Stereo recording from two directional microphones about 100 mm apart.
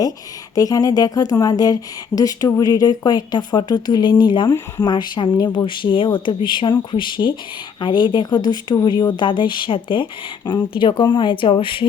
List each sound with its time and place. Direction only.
0.5 s speech: 35° left (ahead or behind); by 11.9 s 55° left (ahead or behind)